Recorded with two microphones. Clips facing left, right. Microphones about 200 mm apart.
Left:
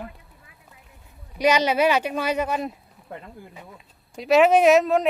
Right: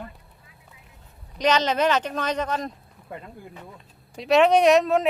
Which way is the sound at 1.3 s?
10° left (ahead or behind).